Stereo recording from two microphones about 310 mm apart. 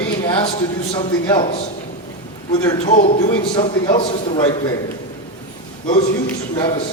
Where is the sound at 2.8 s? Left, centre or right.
Left.